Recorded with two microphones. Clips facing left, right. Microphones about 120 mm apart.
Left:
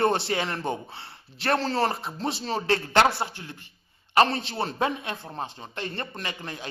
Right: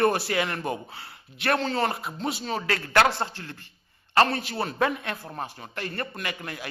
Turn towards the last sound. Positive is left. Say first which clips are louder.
# right 1 dB
turn(degrees=25)  # may be behind; listen again after turning